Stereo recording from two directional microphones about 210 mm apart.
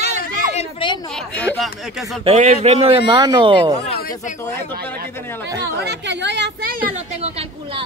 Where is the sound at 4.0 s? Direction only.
40° left (ahead or behind).